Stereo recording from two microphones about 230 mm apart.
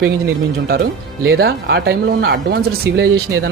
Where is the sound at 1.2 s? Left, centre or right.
Right.